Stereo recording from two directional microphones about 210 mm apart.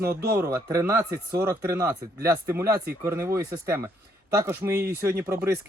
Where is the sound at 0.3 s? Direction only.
10° right (ahead or behind).